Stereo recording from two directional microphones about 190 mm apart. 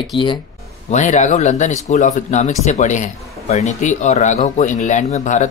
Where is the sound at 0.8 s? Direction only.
40° left (ahead or behind).